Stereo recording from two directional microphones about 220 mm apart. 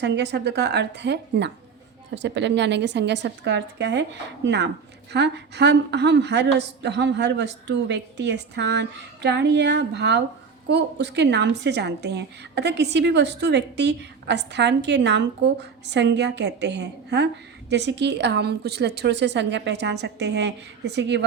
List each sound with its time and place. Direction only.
0.0 s a woman's voice: 50° right (ahead or behind)